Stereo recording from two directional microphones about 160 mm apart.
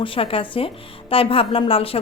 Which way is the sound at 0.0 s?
35° left (ahead or behind).